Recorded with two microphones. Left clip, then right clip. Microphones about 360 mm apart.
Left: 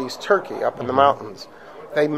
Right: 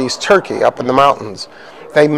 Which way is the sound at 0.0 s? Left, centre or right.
Right.